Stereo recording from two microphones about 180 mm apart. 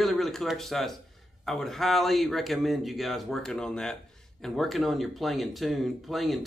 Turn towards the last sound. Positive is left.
turn(degrees=0)  # may be behind; listen again after turning